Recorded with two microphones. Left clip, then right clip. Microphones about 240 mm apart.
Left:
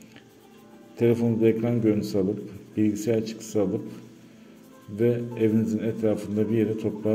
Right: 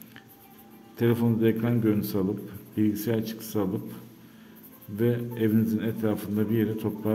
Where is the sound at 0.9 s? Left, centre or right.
Centre.